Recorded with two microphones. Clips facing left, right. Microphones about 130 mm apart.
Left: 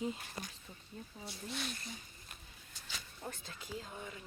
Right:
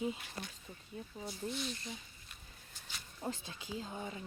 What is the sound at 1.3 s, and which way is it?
Speech, 75° left (ahead or behind).